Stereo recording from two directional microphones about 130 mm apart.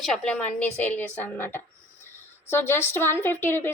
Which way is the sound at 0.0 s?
5° left (ahead or behind).